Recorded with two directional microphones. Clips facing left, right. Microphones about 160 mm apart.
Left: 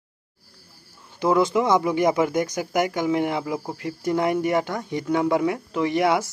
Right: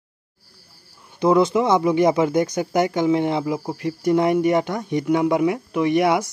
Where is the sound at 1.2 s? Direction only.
20° right (ahead or behind).